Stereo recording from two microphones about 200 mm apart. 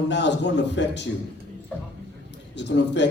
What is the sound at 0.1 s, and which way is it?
Speech, 60° left (ahead or behind).